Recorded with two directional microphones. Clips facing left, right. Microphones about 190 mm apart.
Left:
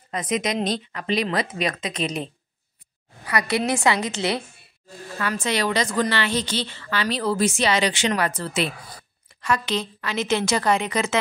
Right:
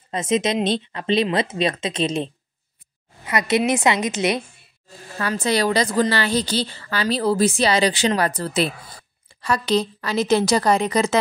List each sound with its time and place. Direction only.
0.1 s speech: 25° right (ahead or behind)
3.3 s speech: 20° right (ahead or behind)
5.2 s a woman's voice: 35° right (ahead or behind)